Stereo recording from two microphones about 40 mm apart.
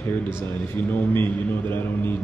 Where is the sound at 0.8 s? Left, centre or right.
Left.